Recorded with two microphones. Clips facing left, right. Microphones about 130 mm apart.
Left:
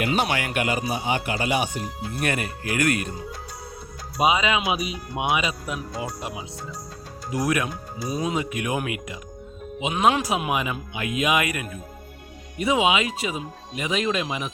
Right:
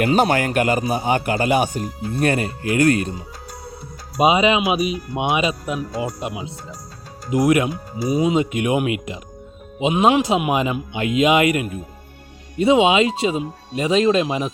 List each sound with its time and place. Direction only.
0.0 s speech: 45° right (ahead or behind)
2.1 s speech: 30° right (ahead or behind)
4.2 s a man's voice: 20° right (ahead or behind)
8.0 s speech: 10° right (ahead or behind)
8.4 s a man's voice: 25° right (ahead or behind)